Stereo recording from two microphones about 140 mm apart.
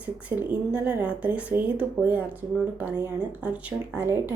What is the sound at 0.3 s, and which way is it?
A woman's voice, 10° right (ahead or behind).